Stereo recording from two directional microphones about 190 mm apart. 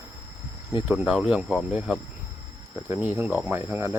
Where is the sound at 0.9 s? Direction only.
5° right (ahead or behind).